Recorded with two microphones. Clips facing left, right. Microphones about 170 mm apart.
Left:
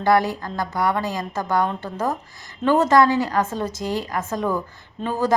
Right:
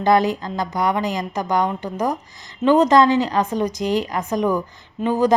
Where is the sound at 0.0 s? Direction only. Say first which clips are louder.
Right 2 dB; 20° right (ahead or behind).